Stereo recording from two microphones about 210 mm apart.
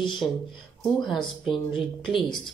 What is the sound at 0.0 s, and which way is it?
Speech, centre (ahead or behind).